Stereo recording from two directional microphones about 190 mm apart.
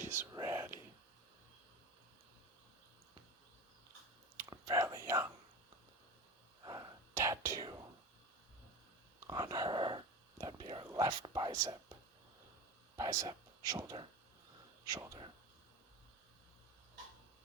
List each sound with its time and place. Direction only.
0.0 s whispering: 15° right (ahead or behind)
4.4 s whispering: 15° right (ahead or behind)
6.7 s whispering: 20° right (ahead or behind)
9.2 s whispering: 20° right (ahead or behind)
13.0 s speech: 20° right (ahead or behind)